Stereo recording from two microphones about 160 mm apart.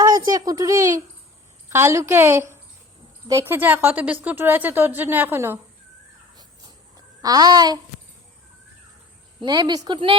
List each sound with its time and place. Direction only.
0.0 s a woman's voice: 25° right (ahead or behind)
7.2 s a child's voice: 25° right (ahead or behind)
9.4 s a child's voice: 25° right (ahead or behind)